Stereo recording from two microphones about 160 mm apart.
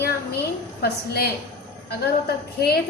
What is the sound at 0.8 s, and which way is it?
A woman's voice, 80° left.